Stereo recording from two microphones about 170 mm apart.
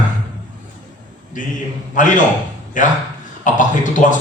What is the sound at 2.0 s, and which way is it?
Speech, 50° left (ahead or behind).